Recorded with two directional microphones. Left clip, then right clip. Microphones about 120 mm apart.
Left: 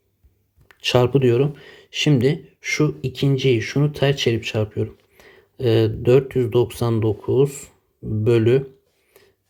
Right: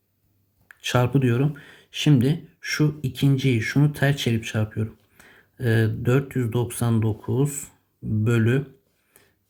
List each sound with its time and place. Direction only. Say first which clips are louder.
0.7 s speech: left 6 dB; 40° left (ahead or behind)